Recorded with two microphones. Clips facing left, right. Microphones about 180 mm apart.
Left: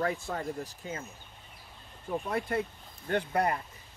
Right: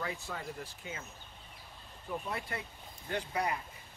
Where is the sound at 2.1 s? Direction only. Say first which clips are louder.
Left 7 dB; 45° left (ahead or behind).